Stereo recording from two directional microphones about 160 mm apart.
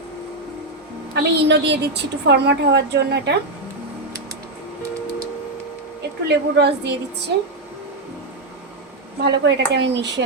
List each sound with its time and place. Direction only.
1.1 s a woman's voice: 90° right
6.0 s a woman's voice: 90° right
9.2 s a woman's voice: 90° right